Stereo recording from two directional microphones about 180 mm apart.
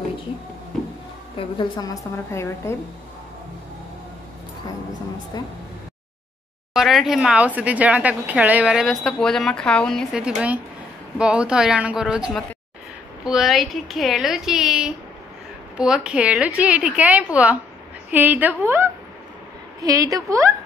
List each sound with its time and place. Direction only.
1.3 s a woman's voice: 25° left (ahead or behind)
6.7 s speech: centre (ahead or behind)
13.2 s a woman's voice: 5° right (ahead or behind); by 20.4 s 20° right (ahead or behind)